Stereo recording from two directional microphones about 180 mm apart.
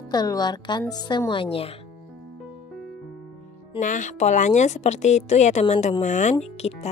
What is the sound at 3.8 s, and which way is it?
Speech, 45° left (ahead or behind).